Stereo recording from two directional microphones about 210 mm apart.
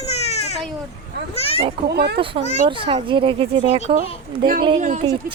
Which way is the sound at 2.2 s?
25° right (ahead or behind).